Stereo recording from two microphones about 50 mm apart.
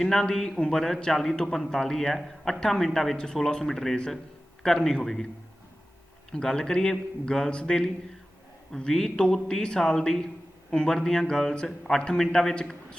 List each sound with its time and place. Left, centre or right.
0.0 s a man's voice: centre
6.3 s a man's voice: centre
12.5 s a man's voice: centre